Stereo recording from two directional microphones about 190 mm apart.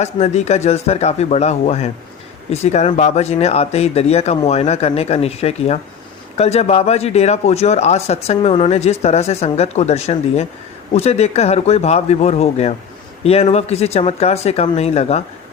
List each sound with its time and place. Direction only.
0.0 s speech: 35° left (ahead or behind)